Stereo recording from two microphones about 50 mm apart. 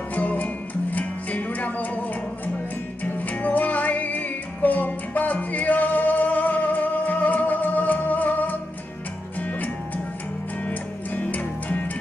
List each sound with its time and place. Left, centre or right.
0.1 s music: left
3.0 s music: left
10.7 s music: left